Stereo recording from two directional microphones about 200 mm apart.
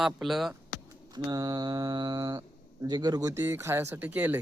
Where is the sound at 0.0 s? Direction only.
Centre (ahead or behind).